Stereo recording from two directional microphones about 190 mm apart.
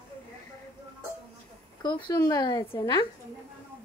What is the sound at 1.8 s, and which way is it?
A woman's voice, 20° left (ahead or behind).